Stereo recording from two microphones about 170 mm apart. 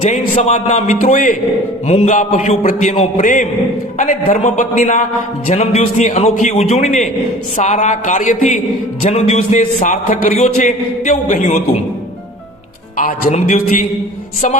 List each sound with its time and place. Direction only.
0.0 s a man's voice: 45° left (ahead or behind)
13.0 s a man's voice: 45° left (ahead or behind)